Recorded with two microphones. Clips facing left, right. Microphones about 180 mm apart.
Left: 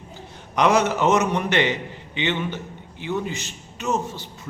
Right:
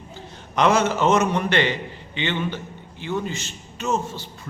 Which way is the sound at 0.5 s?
15° left (ahead or behind).